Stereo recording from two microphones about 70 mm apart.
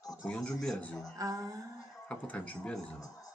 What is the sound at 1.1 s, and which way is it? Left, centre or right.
Speech, right.